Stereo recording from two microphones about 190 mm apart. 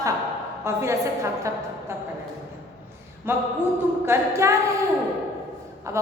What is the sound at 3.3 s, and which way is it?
A woman's voice, 10° right (ahead or behind).